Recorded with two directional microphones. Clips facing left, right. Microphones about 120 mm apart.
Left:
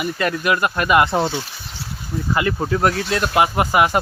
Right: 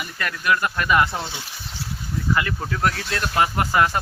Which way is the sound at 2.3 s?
25° left (ahead or behind).